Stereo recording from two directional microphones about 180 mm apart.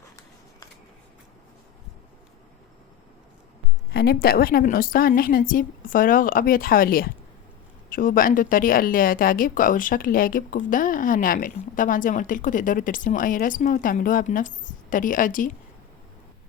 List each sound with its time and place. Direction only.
3.9 s speech: 60° left (ahead or behind)